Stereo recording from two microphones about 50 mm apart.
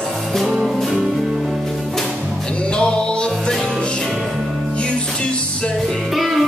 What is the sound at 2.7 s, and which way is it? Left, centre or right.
Music, centre.